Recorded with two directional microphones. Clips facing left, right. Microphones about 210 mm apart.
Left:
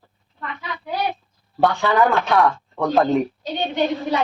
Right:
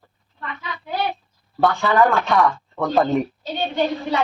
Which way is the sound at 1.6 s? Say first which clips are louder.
Even; centre (ahead or behind).